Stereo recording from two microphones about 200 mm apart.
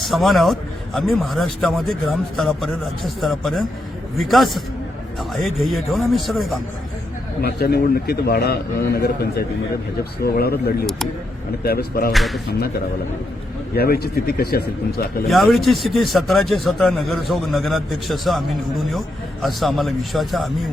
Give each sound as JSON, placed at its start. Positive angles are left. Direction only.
{"t": 0.0, "sound": "a man's voice", "side_deg": 0}
{"t": 7.4, "sound": "a man's voice", "side_deg": 50}
{"t": 12.1, "sound": "a man's voice", "side_deg": 0}
{"t": 13.7, "sound": "a man's voice", "side_deg": 50}
{"t": 15.3, "sound": "a man's voice", "side_deg": 0}